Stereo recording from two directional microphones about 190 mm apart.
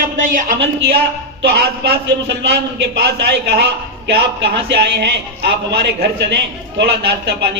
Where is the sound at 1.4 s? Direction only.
60° right (ahead or behind).